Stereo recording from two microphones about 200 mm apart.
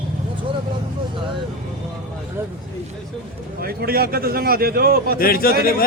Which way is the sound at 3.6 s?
50° right (ahead or behind).